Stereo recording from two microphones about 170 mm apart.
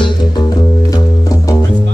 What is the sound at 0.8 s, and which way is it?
Music, 20° left (ahead or behind).